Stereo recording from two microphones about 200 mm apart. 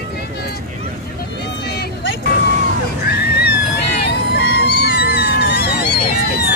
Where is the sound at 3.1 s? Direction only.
55° left (ahead or behind).